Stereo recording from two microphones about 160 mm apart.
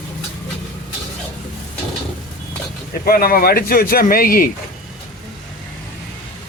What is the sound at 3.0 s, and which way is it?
Speech, 65° left (ahead or behind).